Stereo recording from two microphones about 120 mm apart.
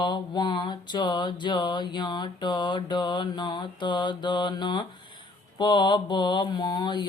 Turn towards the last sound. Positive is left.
turn(degrees=35)  # may be behind; listen again after turning